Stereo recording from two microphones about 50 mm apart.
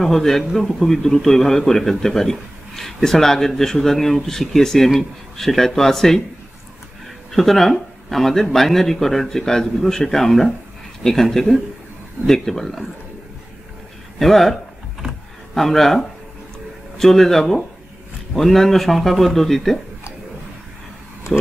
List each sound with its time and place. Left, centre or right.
0.0 s a man's voice: centre
7.3 s a man's voice: centre
14.1 s a man's voice: centre
21.3 s speech: centre